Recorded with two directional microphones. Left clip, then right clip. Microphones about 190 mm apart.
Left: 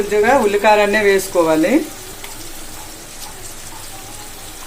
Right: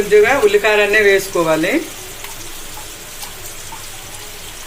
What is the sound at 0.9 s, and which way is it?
Speech, 60° left (ahead or behind).